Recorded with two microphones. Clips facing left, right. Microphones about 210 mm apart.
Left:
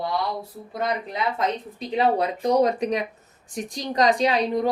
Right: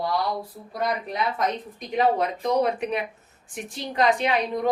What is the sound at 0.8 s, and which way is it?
Speech, 25° left (ahead or behind).